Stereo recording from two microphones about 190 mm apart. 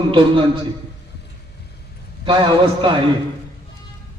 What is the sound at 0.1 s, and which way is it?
Speech, 25° right (ahead or behind).